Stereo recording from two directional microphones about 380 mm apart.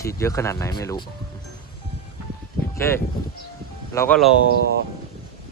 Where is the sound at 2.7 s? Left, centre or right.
Centre.